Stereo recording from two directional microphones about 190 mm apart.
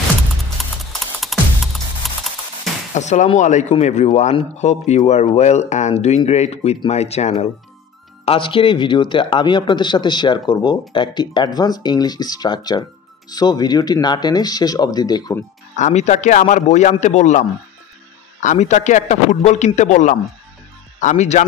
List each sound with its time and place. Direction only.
0.6 s music: centre (ahead or behind)
2.9 s speech: 40° left (ahead or behind); by 15.4 s 20° left (ahead or behind)
15.7 s speech: 35° left (ahead or behind)